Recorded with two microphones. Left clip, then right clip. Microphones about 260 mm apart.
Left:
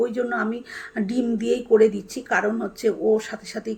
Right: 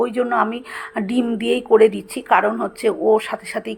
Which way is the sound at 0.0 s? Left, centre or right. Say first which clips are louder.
Right 5 dB; centre.